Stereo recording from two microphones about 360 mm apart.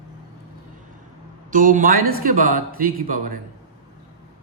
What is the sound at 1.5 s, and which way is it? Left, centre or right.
A man's voice, right.